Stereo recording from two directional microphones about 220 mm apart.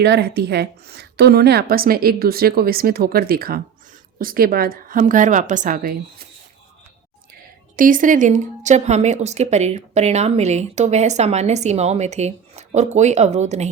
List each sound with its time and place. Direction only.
0.0 s a woman's voice: 50° right (ahead or behind)
7.8 s a woman's voice: 40° right (ahead or behind)